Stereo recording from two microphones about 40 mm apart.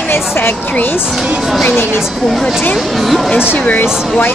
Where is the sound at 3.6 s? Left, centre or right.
Left.